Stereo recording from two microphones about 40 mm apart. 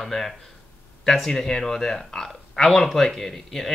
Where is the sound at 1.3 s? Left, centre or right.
Centre.